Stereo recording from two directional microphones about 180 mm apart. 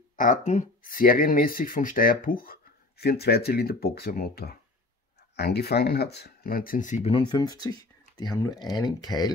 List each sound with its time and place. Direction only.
0.1 s speech: 45° left (ahead or behind); by 9.3 s 20° left (ahead or behind)